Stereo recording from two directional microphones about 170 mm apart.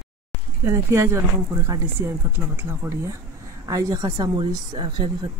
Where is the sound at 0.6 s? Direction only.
15° right (ahead or behind).